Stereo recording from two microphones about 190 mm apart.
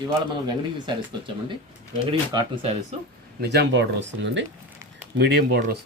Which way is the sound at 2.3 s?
30° right (ahead or behind).